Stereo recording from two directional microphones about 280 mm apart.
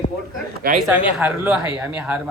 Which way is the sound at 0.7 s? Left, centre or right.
Right.